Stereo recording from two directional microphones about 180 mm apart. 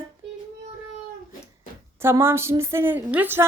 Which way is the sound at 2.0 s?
15° right (ahead or behind).